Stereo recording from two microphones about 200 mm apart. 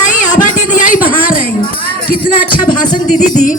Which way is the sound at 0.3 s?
40° left (ahead or behind).